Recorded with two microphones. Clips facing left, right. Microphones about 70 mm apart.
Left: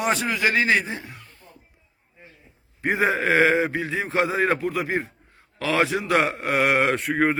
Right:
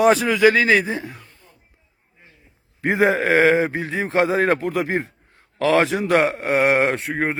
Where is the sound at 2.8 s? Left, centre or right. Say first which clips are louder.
Right 4 dB; right.